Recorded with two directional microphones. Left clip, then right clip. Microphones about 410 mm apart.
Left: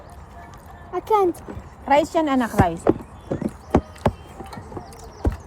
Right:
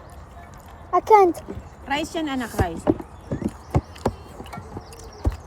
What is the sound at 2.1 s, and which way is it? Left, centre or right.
Speech, centre.